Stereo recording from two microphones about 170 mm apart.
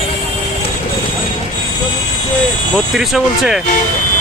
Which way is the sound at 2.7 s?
Centre (ahead or behind).